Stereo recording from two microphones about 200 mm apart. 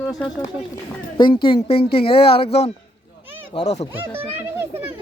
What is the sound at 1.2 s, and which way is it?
Speech, 25° left (ahead or behind).